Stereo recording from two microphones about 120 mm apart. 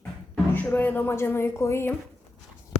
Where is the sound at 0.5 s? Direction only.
15° left (ahead or behind).